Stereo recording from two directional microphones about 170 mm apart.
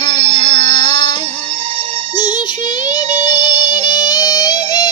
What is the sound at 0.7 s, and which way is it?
Music, 25° left (ahead or behind).